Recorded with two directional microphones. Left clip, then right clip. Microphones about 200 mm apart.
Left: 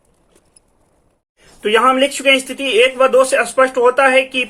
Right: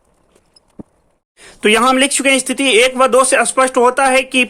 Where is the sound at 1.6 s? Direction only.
50° right (ahead or behind).